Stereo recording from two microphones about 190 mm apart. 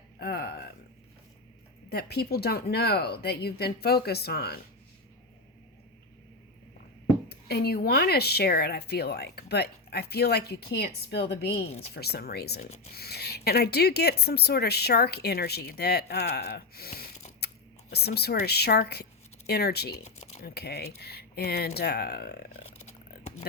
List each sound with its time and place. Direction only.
0.2 s a sound: 55° left (ahead or behind)
1.9 s speech: 55° left (ahead or behind)
7.3 s speech: 60° left (ahead or behind)
12.6 s speech: 35° left (ahead or behind)
12.9 s speech: 55° left (ahead or behind)
20.1 s typing: 35° left (ahead or behind)
20.4 s speech: 55° left (ahead or behind)
22.8 s a sound: 35° left (ahead or behind)